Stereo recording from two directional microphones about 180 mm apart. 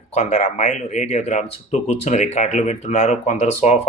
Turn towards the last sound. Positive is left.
turn(degrees=40)  # may be behind; listen again after turning